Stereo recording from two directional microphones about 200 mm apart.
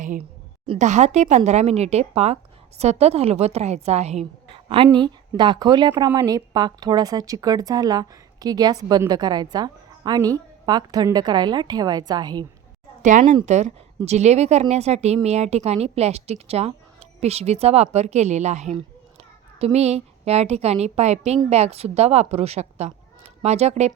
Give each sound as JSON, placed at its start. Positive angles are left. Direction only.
{"t": 0.0, "sound": "a woman's voice", "side_deg": -40}
{"t": 13.0, "sound": "a woman's voice", "side_deg": -40}